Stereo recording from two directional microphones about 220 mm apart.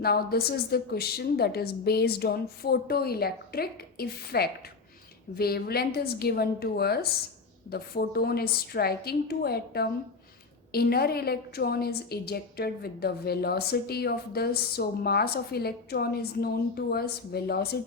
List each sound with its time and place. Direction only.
0.0 s a woman's voice: 45° left (ahead or behind)